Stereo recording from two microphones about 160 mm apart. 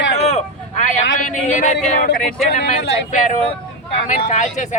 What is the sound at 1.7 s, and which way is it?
Speech, 65° left (ahead or behind).